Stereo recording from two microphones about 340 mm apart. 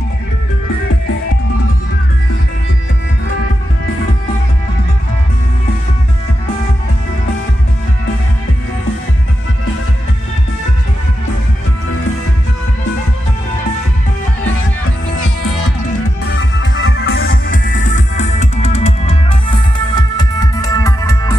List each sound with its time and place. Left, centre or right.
16.3 s music: left; by 21.4 s centre